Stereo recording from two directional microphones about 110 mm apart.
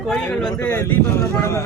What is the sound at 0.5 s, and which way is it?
Speech, 20° left (ahead or behind).